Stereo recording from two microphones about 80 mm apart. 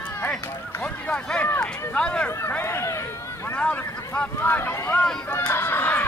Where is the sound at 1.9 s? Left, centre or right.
Centre.